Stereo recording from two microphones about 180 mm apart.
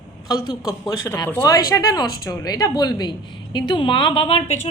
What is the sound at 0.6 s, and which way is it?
A woman's voice, 20° left (ahead or behind).